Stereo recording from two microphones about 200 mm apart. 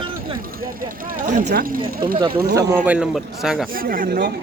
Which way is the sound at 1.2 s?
40° right (ahead or behind).